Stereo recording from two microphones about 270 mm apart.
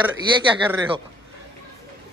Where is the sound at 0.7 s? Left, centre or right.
Centre.